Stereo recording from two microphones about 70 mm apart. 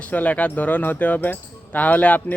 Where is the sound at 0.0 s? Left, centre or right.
Left.